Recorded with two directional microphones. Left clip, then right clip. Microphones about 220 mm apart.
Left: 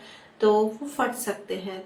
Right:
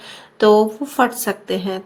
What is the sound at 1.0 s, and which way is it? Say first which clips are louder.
Speech: right 9 dB; 50° right (ahead or behind).